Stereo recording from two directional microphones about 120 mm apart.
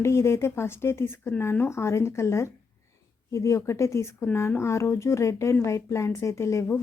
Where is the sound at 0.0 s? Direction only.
20° left (ahead or behind).